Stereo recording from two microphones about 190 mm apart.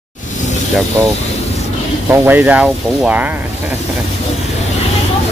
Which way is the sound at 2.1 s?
10° right (ahead or behind).